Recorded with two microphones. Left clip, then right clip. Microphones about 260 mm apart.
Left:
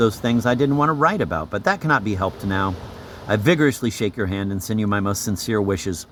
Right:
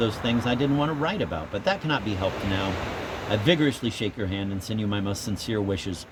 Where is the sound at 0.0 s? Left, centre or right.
Left.